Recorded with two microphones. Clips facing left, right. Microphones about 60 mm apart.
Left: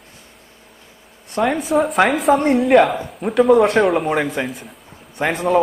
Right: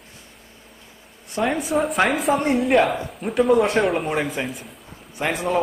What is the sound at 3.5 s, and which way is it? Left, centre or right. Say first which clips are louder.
Speech: left 5 dB; left.